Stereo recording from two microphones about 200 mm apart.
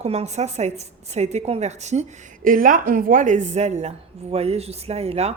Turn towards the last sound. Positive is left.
turn(degrees=-30)  # may be behind; listen again after turning